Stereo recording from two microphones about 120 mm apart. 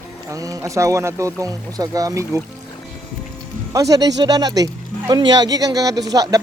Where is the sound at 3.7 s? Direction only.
30° right (ahead or behind).